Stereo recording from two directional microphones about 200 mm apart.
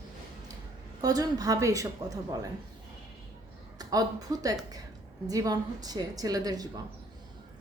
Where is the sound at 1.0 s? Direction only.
20° right (ahead or behind).